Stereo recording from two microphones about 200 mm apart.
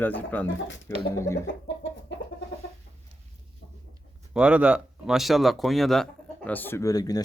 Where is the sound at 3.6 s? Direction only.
55° left (ahead or behind).